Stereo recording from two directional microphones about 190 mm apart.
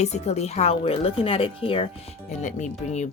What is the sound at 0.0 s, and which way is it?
Speech, 35° left (ahead or behind).